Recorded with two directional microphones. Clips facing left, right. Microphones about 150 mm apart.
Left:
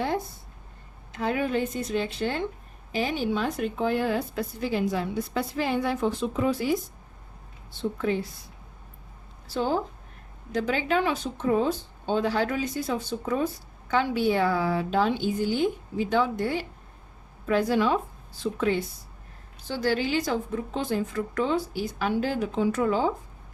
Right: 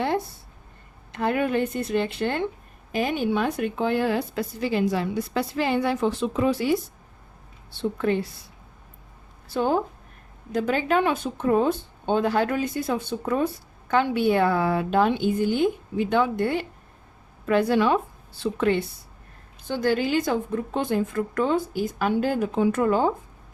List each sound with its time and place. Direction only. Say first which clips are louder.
1.1 s a woman's voice: right 3 dB; 60° right (ahead or behind)
9.5 s speech: right 3 dB; 55° right (ahead or behind)
19.6 s a woman's voice: right 3 dB; 55° right (ahead or behind)